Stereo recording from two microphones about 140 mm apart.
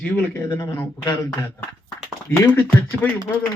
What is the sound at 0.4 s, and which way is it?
A man's voice, 25° left (ahead or behind).